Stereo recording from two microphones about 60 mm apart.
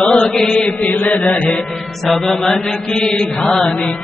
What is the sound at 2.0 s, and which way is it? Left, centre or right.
Music, centre.